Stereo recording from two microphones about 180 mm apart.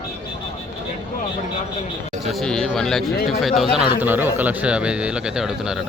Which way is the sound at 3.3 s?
Centre (ahead or behind).